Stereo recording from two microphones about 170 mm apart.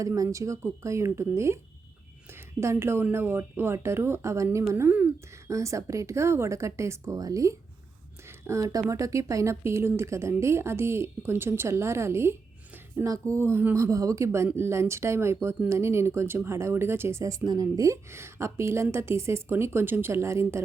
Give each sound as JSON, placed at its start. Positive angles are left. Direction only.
{"t": 0.0, "sound": "a woman's voice", "side_deg": -20}
{"t": 2.6, "sound": "a woman's voice", "side_deg": -15}